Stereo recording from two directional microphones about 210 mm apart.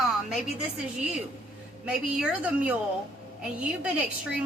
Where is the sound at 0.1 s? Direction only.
Centre (ahead or behind).